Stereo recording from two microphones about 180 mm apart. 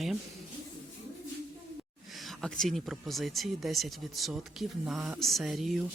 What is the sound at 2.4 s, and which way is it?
Speech, centre (ahead or behind).